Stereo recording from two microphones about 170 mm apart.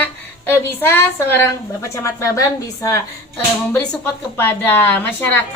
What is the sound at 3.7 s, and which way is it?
A woman's voice, 10° left (ahead or behind).